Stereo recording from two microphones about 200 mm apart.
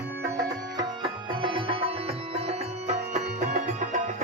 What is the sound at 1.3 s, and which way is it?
Music, 25° right (ahead or behind).